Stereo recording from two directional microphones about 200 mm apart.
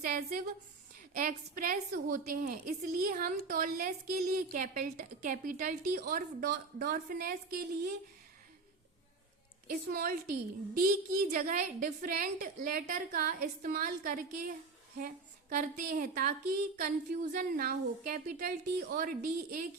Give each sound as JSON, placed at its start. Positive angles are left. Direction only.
{"t": 0.0, "sound": "a woman's voice", "side_deg": -45}
{"t": 9.6, "sound": "a woman's voice", "side_deg": -45}